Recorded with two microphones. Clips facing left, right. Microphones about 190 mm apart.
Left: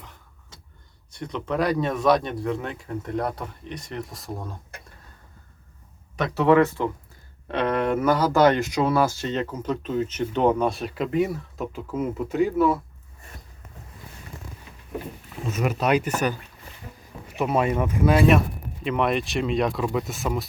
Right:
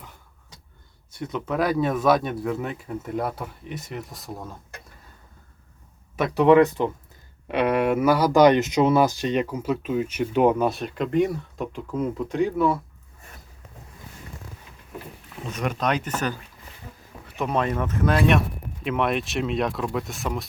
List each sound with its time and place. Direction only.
1.1 s speech: 5° right (ahead or behind)
6.1 s speech: 10° right (ahead or behind)
15.4 s speech: 5° left (ahead or behind)